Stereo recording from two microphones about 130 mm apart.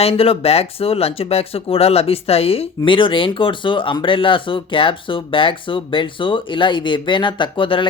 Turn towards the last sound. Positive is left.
turn(degrees=40)  # may be behind; listen again after turning